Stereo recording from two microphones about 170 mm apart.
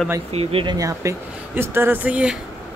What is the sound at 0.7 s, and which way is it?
Speech, 20° right (ahead or behind).